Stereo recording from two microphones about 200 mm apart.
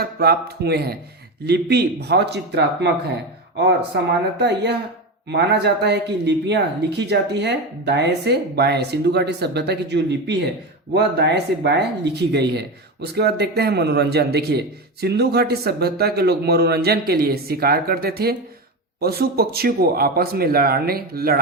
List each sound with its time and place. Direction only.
0.0 s speech: 50° right (ahead or behind)